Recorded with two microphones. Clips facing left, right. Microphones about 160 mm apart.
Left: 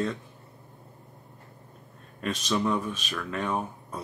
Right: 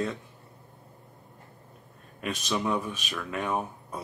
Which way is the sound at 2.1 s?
10° right (ahead or behind).